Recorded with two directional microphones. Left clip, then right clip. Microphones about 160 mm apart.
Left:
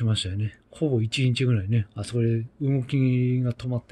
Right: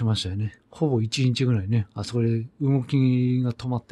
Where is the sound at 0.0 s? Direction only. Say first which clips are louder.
Right 1 dB; 40° right (ahead or behind).